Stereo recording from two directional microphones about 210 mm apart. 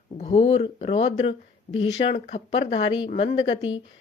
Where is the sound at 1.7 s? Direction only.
60° left (ahead or behind).